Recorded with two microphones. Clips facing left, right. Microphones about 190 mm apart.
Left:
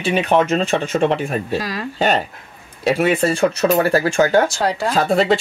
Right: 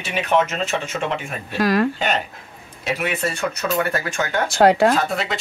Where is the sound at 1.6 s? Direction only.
55° right (ahead or behind).